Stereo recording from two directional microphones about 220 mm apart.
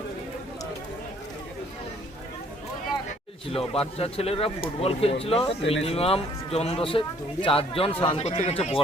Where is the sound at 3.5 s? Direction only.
25° left (ahead or behind).